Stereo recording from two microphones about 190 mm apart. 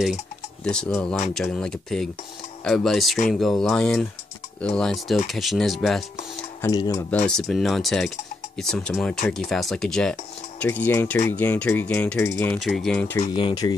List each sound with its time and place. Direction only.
0.7 s speech: 5° left (ahead or behind)
6.6 s mechanisms: 20° left (ahead or behind)
7.2 s speech: centre (ahead or behind)
10.6 s mechanisms: 10° left (ahead or behind)
12.5 s speech: centre (ahead or behind)
13.3 s speech: 25° left (ahead or behind)